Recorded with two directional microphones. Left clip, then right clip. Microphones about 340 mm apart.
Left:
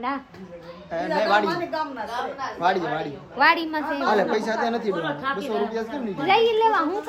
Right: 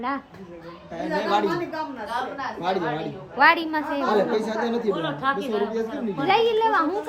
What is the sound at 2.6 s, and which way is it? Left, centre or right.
Speech, centre.